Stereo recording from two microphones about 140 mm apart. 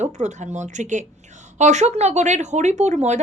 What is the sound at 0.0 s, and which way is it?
Speech, 55° right (ahead or behind).